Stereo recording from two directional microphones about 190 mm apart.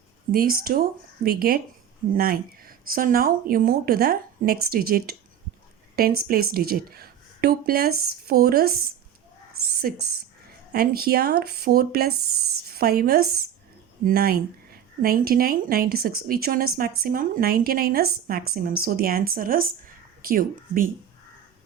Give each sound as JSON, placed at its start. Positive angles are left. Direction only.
{"t": 0.3, "sound": "speech", "side_deg": -50}
{"t": 9.8, "sound": "speech", "side_deg": -50}